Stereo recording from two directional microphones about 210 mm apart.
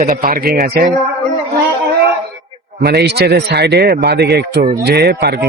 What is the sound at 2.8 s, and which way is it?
A man's voice, 50° right (ahead or behind).